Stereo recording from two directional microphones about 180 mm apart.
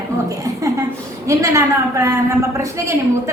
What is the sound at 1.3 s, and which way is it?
A woman's voice, 15° right (ahead or behind).